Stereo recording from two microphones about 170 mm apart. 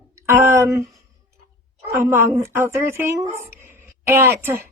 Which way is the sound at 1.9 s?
15° right (ahead or behind).